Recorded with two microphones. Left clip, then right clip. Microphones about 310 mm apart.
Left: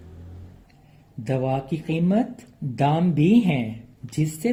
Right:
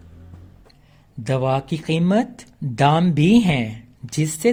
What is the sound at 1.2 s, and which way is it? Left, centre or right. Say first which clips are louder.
Speech: right 4 dB; right.